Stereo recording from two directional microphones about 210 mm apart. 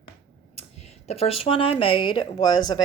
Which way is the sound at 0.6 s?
30° left (ahead or behind).